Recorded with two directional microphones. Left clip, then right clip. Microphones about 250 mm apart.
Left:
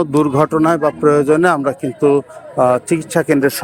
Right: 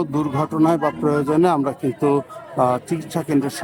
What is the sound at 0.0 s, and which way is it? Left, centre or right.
A man's voice, centre.